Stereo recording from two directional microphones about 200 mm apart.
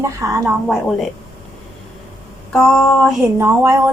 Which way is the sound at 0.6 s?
Centre (ahead or behind).